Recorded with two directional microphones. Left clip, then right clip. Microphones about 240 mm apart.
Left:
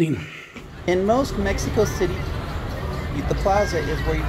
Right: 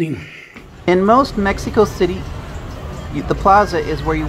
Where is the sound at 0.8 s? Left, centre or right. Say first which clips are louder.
Right 7 dB; right.